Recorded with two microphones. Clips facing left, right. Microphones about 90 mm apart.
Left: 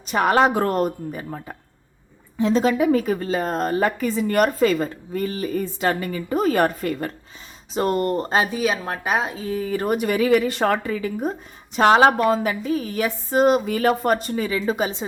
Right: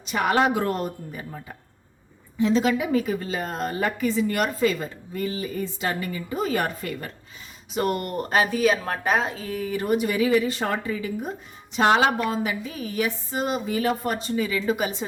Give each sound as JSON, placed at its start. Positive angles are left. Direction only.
{"t": 0.0, "sound": "a woman's voice", "side_deg": 40}
{"t": 7.7, "sound": "speech", "side_deg": 30}
{"t": 9.5, "sound": "a woman's voice", "side_deg": 30}
{"t": 9.8, "sound": "a woman's voice", "side_deg": 50}